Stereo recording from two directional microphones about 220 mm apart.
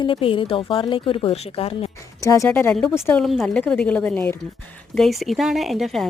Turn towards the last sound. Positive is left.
turn(degrees=0)  # may be behind; listen again after turning